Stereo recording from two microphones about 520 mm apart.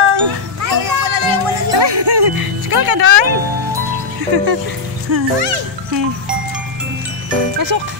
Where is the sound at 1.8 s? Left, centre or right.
Right.